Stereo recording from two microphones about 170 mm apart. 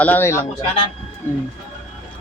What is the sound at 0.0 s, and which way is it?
Speech, 10° left (ahead or behind).